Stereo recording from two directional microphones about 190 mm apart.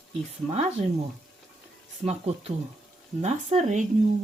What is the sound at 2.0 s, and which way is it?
Speech, 35° right (ahead or behind).